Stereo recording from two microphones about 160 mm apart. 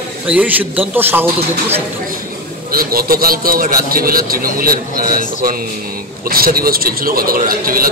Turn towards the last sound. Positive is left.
turn(degrees=-65)  # may be behind; listen again after turning